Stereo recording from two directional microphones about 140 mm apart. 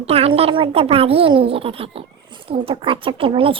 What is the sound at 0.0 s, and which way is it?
Speech, 45° right (ahead or behind).